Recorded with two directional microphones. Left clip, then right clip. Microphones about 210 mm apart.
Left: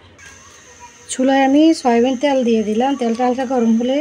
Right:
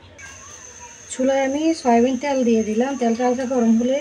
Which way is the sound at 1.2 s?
50° left (ahead or behind).